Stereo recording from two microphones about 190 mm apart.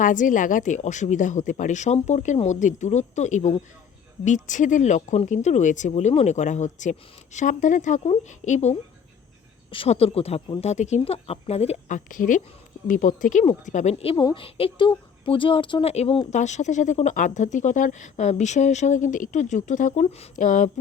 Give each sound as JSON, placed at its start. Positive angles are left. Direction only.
{"t": 0.0, "sound": "speech", "side_deg": 40}